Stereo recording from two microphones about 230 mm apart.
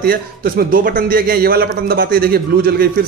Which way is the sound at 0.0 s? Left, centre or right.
Right.